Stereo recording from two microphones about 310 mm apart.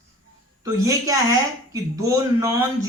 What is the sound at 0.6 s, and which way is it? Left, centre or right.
Speech, centre.